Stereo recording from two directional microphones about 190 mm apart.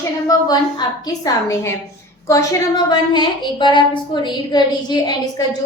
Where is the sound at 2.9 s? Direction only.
25° left (ahead or behind).